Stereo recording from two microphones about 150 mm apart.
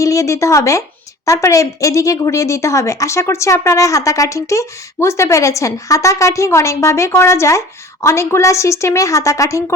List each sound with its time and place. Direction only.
0.0 s a woman's voice: 20° left (ahead or behind)